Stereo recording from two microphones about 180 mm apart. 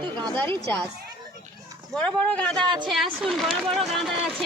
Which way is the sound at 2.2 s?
5° left (ahead or behind).